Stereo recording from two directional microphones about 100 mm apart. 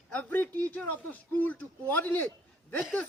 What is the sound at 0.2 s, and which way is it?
A woman's voice, 20° left (ahead or behind).